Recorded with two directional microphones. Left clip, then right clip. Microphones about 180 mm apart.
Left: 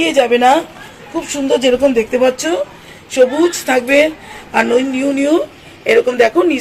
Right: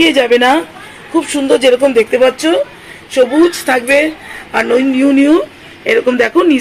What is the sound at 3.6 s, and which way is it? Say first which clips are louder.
A woman's voice: right 1 dB; 45° right (ahead or behind).